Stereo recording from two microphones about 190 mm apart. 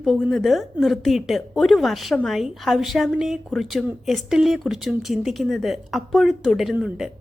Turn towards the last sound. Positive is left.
turn(degrees=-5)  # may be behind; listen again after turning